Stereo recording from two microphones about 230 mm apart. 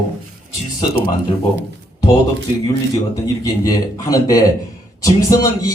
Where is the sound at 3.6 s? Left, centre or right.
Centre.